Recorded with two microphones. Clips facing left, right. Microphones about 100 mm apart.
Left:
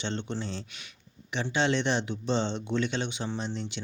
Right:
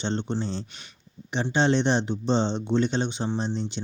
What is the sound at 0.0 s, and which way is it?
Speech, 30° right (ahead or behind).